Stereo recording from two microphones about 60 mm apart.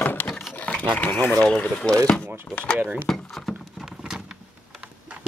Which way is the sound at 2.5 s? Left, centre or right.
Left.